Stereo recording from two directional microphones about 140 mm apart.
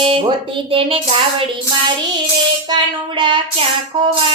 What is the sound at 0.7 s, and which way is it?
Speech, 40° right (ahead or behind).